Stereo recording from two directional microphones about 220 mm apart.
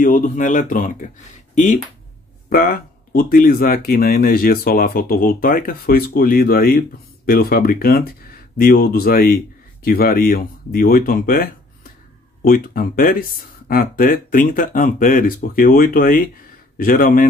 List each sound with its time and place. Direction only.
0.0 s speech: 35° left (ahead or behind)